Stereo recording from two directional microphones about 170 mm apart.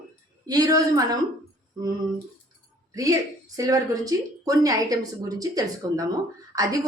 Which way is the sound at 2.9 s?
20° right (ahead or behind).